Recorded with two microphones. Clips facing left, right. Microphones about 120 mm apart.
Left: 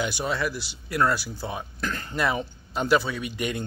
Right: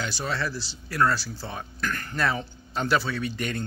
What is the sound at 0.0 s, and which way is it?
Speech, 15° left (ahead or behind).